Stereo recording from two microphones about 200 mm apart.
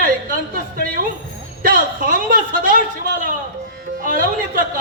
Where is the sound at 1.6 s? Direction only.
45° right (ahead or behind).